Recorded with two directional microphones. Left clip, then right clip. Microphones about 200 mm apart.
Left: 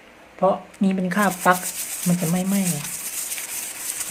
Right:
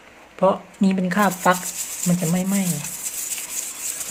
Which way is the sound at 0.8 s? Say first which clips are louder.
Right 2 dB; 15° right (ahead or behind).